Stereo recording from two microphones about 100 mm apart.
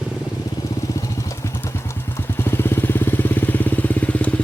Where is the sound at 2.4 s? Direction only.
25° left (ahead or behind).